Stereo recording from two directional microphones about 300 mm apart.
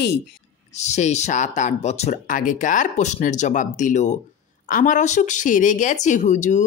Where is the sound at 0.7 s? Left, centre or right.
Left.